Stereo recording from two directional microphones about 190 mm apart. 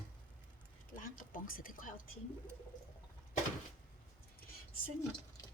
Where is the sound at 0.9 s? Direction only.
45° left (ahead or behind).